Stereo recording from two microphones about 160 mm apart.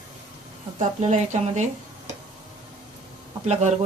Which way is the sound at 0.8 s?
45° right (ahead or behind).